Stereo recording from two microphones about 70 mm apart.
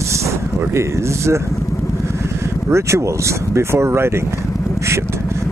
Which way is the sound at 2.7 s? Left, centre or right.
Right.